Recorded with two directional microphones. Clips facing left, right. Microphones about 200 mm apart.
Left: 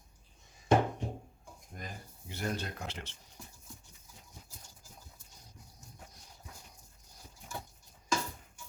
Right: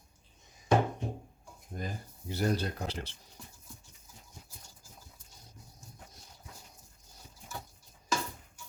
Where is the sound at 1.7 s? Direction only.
35° right (ahead or behind).